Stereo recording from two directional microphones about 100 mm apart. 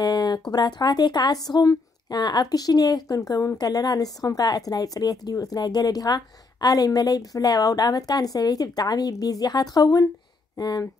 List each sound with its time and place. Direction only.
0.0 s speech: 45° left (ahead or behind)